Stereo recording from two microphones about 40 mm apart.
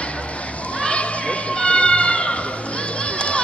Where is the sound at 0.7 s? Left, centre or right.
Left.